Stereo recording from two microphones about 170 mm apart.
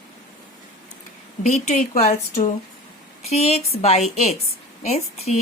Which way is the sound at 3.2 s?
40° left (ahead or behind).